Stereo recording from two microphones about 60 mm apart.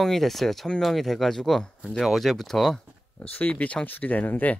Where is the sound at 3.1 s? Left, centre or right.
Left.